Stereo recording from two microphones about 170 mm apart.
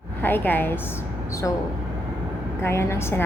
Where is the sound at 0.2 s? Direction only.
10° left (ahead or behind).